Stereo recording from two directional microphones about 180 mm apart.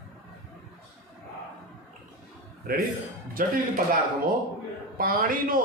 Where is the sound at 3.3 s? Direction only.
50° right (ahead or behind).